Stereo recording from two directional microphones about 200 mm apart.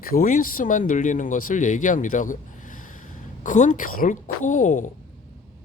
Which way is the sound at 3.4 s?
40° left (ahead or behind).